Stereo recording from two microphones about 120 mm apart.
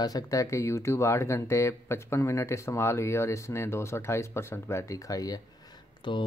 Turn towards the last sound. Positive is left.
turn(degrees=40)  # may be behind; listen again after turning